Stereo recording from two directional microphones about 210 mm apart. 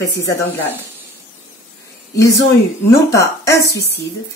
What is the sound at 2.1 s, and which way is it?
Speech, 15° left (ahead or behind).